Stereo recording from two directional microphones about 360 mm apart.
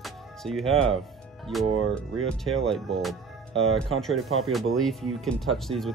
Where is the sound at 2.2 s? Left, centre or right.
Centre.